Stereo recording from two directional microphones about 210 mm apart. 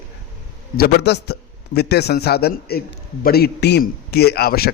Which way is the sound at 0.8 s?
50° left (ahead or behind).